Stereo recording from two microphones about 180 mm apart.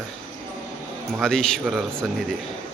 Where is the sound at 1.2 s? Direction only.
5° left (ahead or behind).